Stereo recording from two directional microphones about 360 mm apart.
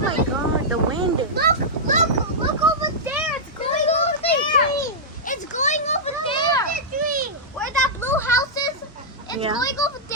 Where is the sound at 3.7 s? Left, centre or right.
Centre.